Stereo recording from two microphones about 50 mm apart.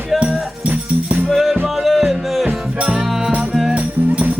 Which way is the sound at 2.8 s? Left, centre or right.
Right.